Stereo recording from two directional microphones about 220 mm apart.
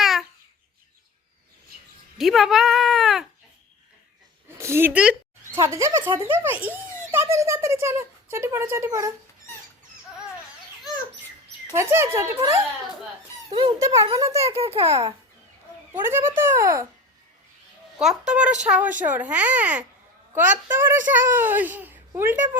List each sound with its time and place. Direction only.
0.0 s babbling: centre (ahead or behind)
2.1 s speech: centre (ahead or behind)
4.5 s a child's voice: 10° right (ahead or behind)
11.7 s a child's voice: 10° right (ahead or behind)
13.5 s a child's voice: 20° right (ahead or behind)
14.4 s a child's voice: 30° right (ahead or behind)
16.0 s a child's voice: 10° right (ahead or behind)
18.3 s a child's voice: 5° right (ahead or behind)